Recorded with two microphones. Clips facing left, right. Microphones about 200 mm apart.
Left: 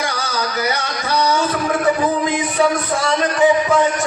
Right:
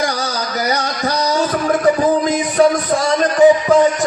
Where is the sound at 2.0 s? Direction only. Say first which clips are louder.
Right 3 dB; 40° right (ahead or behind).